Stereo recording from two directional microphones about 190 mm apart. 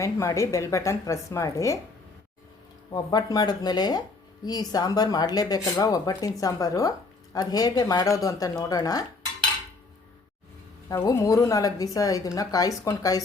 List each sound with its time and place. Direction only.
0.0 s a woman's voice: 15° left (ahead or behind)
2.9 s speech: 20° left (ahead or behind)
10.8 s a woman's voice: 15° left (ahead or behind)